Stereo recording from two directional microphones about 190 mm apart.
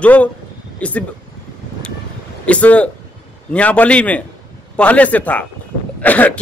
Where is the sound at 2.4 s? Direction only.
5° left (ahead or behind).